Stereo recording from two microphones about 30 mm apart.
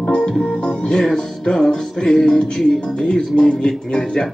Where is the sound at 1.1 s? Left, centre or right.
Left.